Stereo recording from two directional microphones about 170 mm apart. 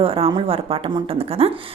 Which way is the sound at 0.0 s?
35° right (ahead or behind).